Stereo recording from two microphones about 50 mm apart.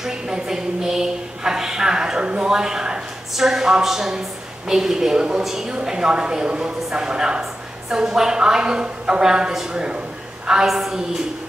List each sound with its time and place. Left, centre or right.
0.0 s a woman's voice: centre